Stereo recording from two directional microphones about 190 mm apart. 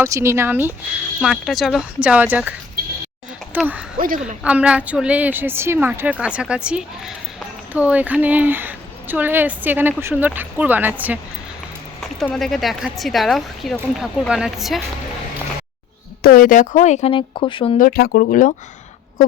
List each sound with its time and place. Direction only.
0.0 s a woman's voice: 15° right (ahead or behind)
1.2 s a woman's voice: centre (ahead or behind)
12.2 s a woman's voice: centre (ahead or behind)
16.2 s speech: 50° left (ahead or behind); by 17.7 s 25° left (ahead or behind)
17.7 s speech: 50° left (ahead or behind)